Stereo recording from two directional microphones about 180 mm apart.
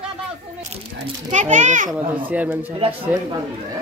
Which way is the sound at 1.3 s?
40° right (ahead or behind).